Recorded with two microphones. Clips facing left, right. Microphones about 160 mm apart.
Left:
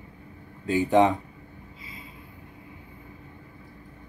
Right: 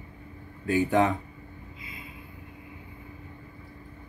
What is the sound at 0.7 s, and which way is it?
Speech, 20° left (ahead or behind).